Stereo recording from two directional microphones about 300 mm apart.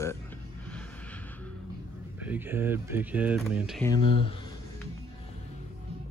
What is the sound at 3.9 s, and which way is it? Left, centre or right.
Speech, right.